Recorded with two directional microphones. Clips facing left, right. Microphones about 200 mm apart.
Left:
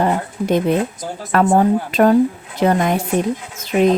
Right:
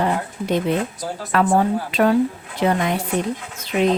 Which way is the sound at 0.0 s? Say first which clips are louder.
Left 3 dB; 45° left (ahead or behind).